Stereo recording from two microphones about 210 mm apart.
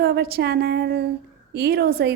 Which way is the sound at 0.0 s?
45° right (ahead or behind).